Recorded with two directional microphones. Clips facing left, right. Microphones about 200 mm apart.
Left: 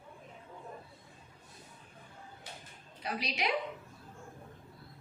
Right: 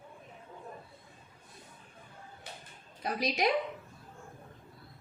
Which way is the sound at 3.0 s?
45° right (ahead or behind).